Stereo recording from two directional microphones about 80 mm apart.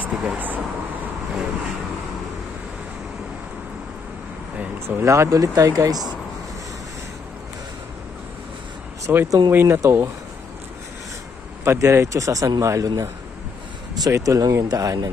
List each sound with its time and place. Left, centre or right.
0.0 s vehicle: centre
4.8 s speech: right
9.0 s speech: right
11.6 s speech: right
14.0 s speech: right